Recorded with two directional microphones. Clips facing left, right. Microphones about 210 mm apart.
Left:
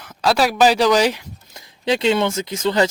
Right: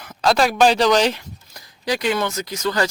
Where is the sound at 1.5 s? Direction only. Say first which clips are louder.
Left 4 dB; 25° left (ahead or behind).